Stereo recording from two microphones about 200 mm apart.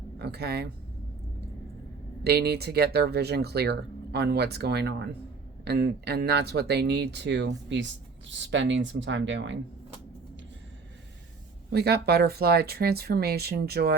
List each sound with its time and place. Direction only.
0.2 s speech: 55° right (ahead or behind)
2.2 s speech: 55° right (ahead or behind)
11.7 s speech: 55° right (ahead or behind)